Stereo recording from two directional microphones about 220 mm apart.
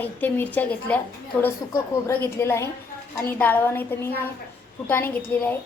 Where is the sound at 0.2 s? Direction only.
5° left (ahead or behind).